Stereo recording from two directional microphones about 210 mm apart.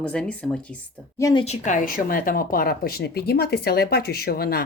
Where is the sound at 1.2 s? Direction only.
25° left (ahead or behind).